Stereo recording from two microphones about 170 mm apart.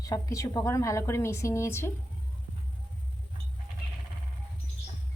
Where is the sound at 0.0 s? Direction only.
20° left (ahead or behind).